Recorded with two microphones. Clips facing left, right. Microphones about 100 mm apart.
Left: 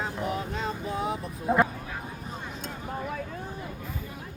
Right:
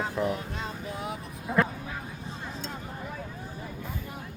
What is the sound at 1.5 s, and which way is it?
Speech, 30° left (ahead or behind).